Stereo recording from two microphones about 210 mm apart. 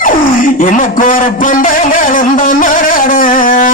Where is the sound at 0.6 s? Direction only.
40° left (ahead or behind).